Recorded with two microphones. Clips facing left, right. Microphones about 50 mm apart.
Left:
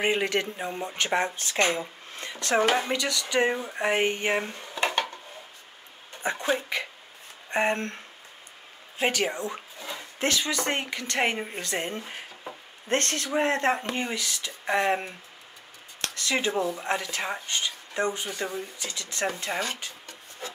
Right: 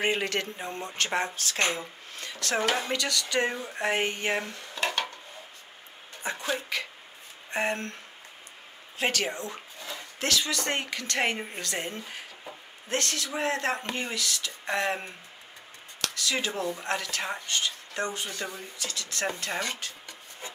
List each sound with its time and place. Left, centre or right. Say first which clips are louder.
0.0 s speech: left 3 dB; centre
4.6 s dishes: left 3 dB; left
6.2 s speech: left 4 dB; left
8.9 s speech: left 2 dB; centre
9.8 s a sound: left 2 dB; centre
10.1 s speech: left 2 dB; left
11.6 s speech: left 3 dB; left
12.8 s speech: left 3 dB; left; by 19.6 s centre